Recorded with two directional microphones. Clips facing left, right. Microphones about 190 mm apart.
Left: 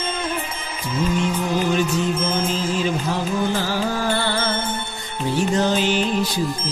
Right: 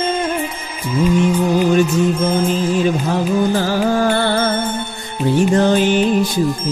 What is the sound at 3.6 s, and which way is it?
Music, 50° right (ahead or behind).